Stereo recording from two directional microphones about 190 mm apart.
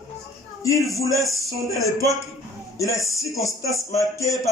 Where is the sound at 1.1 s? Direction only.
15° left (ahead or behind).